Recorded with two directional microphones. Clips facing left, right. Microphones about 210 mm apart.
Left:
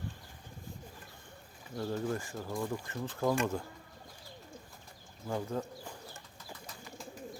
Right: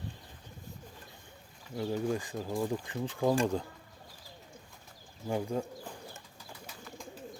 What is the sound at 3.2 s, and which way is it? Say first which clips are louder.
Speech: right 3 dB; 30° right (ahead or behind).